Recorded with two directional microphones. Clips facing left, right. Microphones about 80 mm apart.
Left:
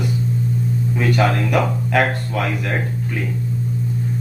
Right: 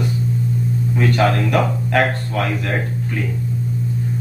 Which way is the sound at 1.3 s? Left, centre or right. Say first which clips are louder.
Right 1 dB; centre.